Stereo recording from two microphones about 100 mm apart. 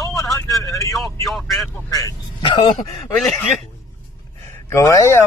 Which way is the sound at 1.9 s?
35° left (ahead or behind).